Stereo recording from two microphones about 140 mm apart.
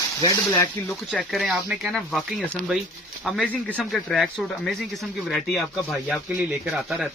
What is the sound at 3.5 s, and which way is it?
Speech, 10° left (ahead or behind).